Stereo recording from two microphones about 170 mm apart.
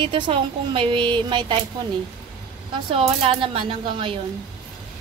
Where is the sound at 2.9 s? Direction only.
35° right (ahead or behind).